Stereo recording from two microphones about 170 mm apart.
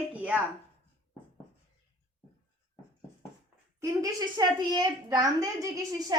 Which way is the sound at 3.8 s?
20° right (ahead or behind).